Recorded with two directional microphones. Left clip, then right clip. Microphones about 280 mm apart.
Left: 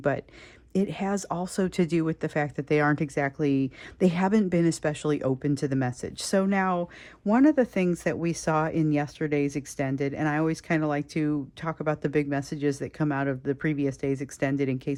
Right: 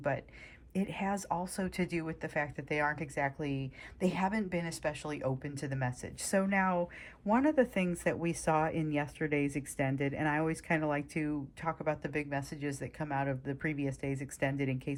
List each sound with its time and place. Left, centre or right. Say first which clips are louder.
0.0 s speech: left 7 dB; centre